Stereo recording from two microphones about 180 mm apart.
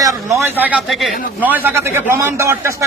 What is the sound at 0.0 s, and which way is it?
A man's voice, 15° right (ahead or behind).